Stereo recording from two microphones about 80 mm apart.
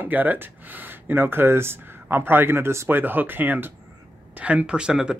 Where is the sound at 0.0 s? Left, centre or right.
Right.